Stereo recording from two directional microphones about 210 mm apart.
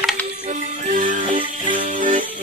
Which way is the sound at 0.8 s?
40° right (ahead or behind).